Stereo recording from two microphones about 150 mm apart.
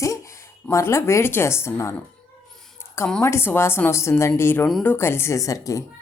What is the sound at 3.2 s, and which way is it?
Speech, 15° left (ahead or behind).